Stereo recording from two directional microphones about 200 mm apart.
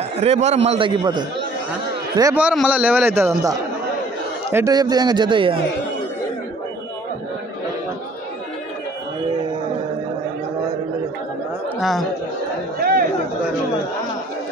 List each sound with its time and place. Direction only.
0.2 s a man's voice: 35° right (ahead or behind)
11.8 s speech: centre (ahead or behind)
12.7 s chatter: 50° right (ahead or behind)